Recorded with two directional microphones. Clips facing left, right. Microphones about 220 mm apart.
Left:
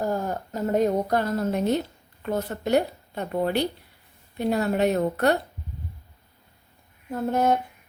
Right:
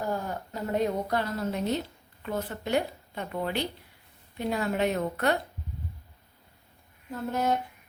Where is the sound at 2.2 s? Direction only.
40° left (ahead or behind).